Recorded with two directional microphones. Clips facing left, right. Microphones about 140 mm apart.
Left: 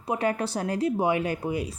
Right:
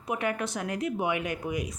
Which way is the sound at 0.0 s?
30° left (ahead or behind).